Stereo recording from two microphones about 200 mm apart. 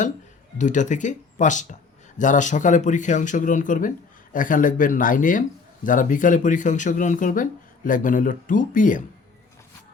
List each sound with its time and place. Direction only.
0.6 s speech: 40° left (ahead or behind)